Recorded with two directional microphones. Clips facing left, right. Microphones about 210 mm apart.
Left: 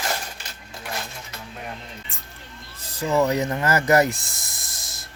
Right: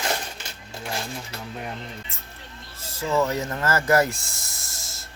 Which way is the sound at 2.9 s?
15° left (ahead or behind).